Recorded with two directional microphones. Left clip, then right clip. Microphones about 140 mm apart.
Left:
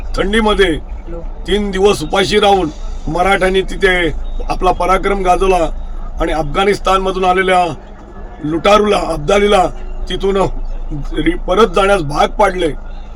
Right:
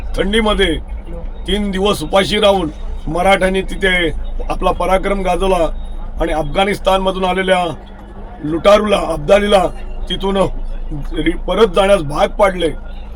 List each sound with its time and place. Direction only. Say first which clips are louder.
0.1 s a man's voice: left 1 dB; 10° left (ahead or behind)